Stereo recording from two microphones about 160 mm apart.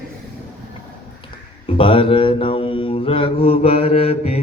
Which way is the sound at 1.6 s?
35° left (ahead or behind).